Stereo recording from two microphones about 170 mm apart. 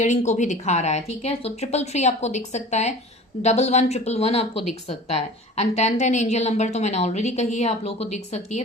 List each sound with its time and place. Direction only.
0.0 s a woman's voice: 45° left (ahead or behind)